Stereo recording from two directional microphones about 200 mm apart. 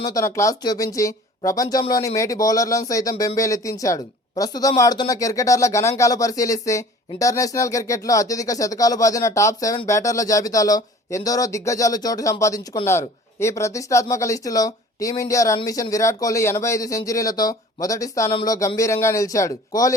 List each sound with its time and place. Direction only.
0.0 s speech: 20° left (ahead or behind)